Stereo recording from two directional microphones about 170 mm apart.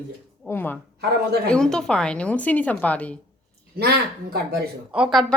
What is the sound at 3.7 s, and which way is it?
Speech, 70° right (ahead or behind).